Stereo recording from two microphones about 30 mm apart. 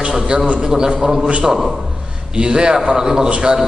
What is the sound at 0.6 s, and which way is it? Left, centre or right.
Speech, right.